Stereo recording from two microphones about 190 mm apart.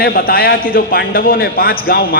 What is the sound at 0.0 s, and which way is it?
A man's voice, 50° left (ahead or behind).